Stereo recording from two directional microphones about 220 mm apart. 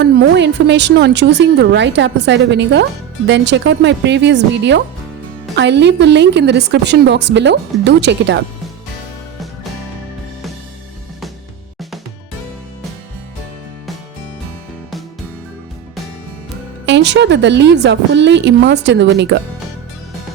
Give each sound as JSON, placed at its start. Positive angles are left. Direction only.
{"t": 0.0, "sound": "a woman's voice", "side_deg": -50}
{"t": 16.8, "sound": "a woman's voice", "side_deg": -55}